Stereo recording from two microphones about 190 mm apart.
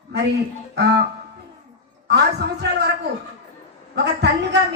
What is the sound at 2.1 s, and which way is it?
Speech, 60° right (ahead or behind).